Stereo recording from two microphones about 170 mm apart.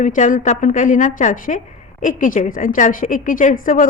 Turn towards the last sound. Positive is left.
turn(degrees=50)  # may be behind; listen again after turning